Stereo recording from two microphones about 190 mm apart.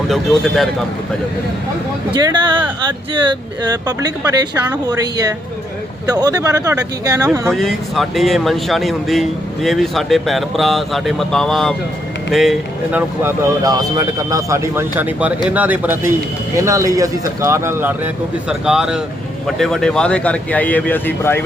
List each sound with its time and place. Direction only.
0.1 s speech: centre (ahead or behind)
2.1 s speech: 20° right (ahead or behind)
7.5 s speech: centre (ahead or behind)
13.6 s speech: 20° right (ahead or behind); by 21.1 s 10° left (ahead or behind)